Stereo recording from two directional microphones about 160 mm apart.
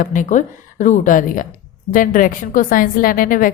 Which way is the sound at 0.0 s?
55° left (ahead or behind).